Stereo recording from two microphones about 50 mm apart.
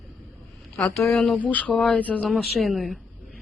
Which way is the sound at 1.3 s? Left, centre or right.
Left.